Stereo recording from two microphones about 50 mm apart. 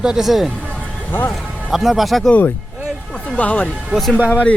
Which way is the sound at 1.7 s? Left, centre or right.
Centre.